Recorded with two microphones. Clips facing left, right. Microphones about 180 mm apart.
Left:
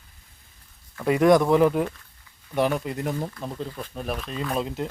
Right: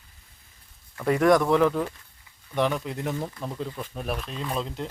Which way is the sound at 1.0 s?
15° left (ahead or behind).